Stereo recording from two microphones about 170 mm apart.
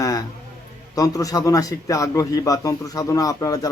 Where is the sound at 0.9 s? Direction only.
20° left (ahead or behind).